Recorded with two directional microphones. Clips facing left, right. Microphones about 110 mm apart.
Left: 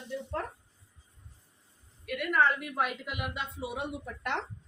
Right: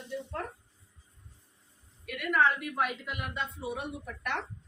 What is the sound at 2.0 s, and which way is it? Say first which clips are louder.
A woman's voice: even; centre (ahead or behind).